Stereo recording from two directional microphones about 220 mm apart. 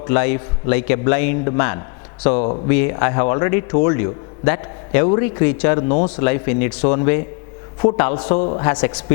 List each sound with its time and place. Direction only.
0.1 s a man's voice: 10° left (ahead or behind)
8.4 s a man's voice: 25° left (ahead or behind)
8.6 s a man's voice: 10° left (ahead or behind)